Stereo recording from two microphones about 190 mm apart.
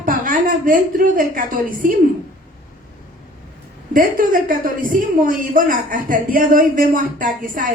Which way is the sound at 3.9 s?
45° right (ahead or behind).